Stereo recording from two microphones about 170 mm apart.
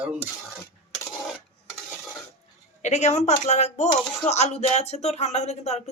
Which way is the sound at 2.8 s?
45° left (ahead or behind).